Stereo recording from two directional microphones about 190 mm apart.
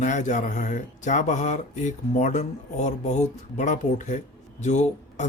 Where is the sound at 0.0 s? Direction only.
40° left (ahead or behind).